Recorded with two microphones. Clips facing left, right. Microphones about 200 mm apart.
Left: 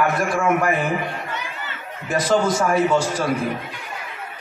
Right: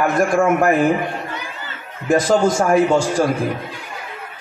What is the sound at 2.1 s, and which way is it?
Speech, 45° right (ahead or behind).